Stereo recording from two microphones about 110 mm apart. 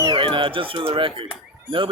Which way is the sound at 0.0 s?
50° right (ahead or behind).